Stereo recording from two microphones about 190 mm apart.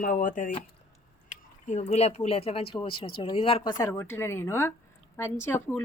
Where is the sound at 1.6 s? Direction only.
35° left (ahead or behind).